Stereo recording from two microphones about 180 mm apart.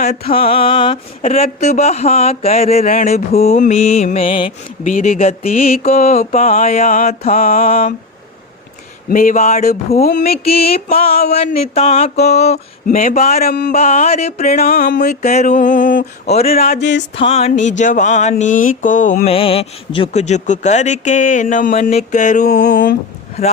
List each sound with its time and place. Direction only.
0.0 s speech: 35° left (ahead or behind)
4.9 s mantra: 45° left (ahead or behind)
7.6 s speech: 35° left (ahead or behind)
9.0 s mantra: 50° left (ahead or behind)
9.9 s speech: 40° left (ahead or behind)
14.7 s mantra: 55° left (ahead or behind)
17.2 s mantra: 30° left (ahead or behind)
19.3 s speech: 30° left (ahead or behind); by 23.0 s 50° left (ahead or behind)
23.4 s speech: 35° left (ahead or behind)